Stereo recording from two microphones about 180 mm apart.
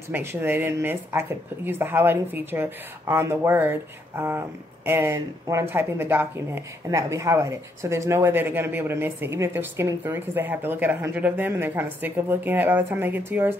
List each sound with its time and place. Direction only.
0.1 s speech: 15° right (ahead or behind)